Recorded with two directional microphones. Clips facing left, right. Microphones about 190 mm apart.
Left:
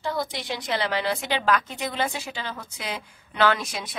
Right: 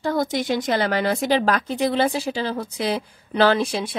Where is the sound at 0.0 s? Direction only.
50° right (ahead or behind).